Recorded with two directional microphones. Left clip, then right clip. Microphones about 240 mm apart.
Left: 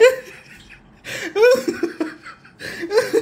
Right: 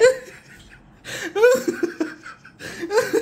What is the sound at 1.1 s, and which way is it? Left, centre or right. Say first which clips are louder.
Laughter: left 2 dB; centre.